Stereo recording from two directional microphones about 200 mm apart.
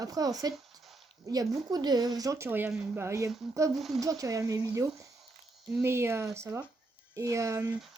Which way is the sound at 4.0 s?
15° right (ahead or behind).